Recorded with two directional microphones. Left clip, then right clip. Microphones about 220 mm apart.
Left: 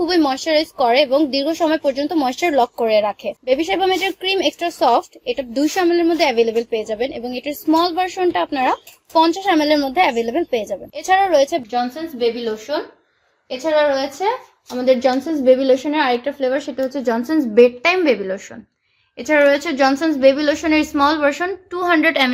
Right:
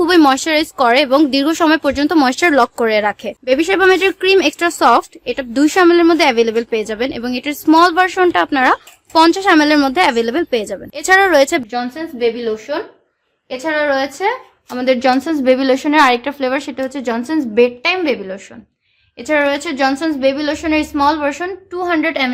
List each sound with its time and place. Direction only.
0.0 s speech: 30° right (ahead or behind)
11.7 s a woman's voice: 5° right (ahead or behind)
13.5 s a woman's voice: 5° right (ahead or behind)
17.4 s a woman's voice: 15° left (ahead or behind)